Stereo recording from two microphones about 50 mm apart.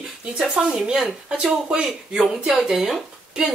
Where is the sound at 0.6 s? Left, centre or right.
Centre.